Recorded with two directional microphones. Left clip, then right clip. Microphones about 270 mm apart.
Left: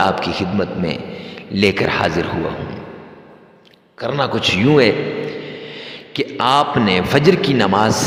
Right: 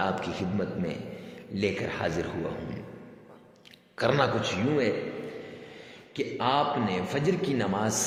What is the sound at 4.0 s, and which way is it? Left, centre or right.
Speech, centre.